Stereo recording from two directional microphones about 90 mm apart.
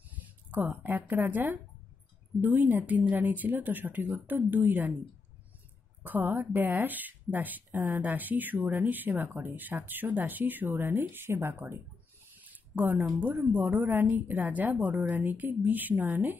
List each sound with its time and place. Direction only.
0.1 s speech: 15° right (ahead or behind)
6.0 s speech: 25° right (ahead or behind)